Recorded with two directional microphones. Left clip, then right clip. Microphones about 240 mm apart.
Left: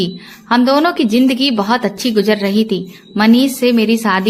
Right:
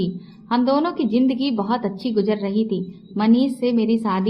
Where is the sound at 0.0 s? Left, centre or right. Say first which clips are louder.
Left 7 dB; left.